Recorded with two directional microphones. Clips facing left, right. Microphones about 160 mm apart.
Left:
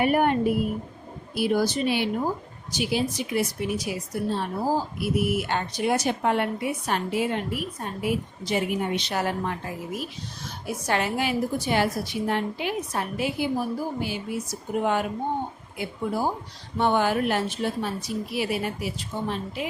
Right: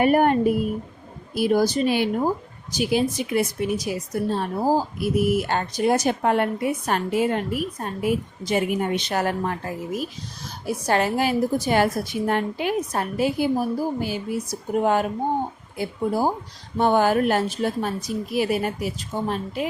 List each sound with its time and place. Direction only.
0.0 s speech: 45° right (ahead or behind)